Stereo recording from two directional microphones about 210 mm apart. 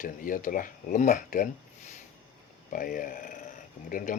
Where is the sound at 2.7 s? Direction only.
40° left (ahead or behind).